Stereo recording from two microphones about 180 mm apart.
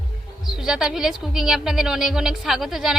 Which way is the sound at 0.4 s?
5° right (ahead or behind).